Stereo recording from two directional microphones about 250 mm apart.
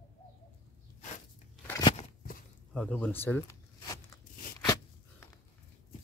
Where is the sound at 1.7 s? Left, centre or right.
Centre.